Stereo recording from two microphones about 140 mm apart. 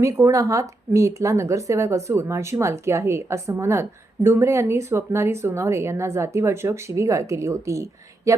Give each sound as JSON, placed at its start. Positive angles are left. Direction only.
{"t": 0.0, "sound": "speech", "side_deg": -20}